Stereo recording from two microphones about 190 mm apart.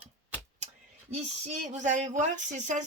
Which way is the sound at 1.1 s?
35° right (ahead or behind).